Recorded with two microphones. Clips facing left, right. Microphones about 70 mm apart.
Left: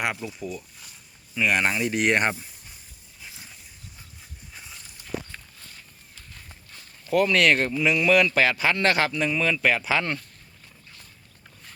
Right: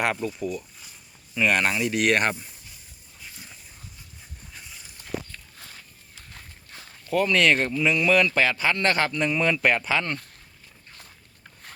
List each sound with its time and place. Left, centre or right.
0.0 s speech: centre
1.4 s speech: centre
1.8 s speech: left
3.2 s dog: centre
7.1 s speech: centre
9.1 s speech: centre
9.9 s speech: centre